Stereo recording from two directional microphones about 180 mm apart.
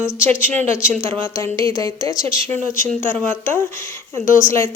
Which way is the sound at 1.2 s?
15° left (ahead or behind).